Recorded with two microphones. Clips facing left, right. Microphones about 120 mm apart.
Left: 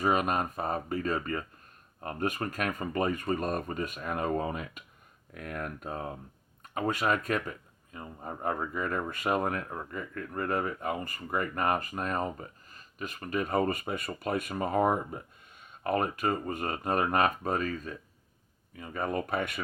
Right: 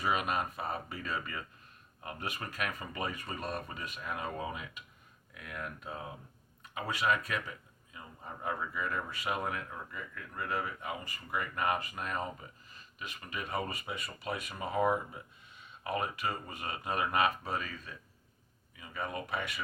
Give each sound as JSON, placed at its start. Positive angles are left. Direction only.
{"t": 0.0, "sound": "speech", "side_deg": 45}